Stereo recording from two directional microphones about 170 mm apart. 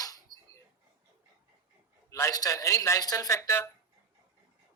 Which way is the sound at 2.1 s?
20° left (ahead or behind).